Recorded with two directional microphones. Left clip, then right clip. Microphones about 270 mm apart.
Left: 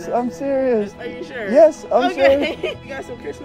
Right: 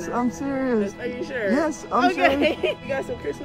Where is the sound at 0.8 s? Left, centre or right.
Centre.